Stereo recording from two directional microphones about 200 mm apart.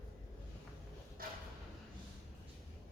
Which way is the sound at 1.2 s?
45° right (ahead or behind).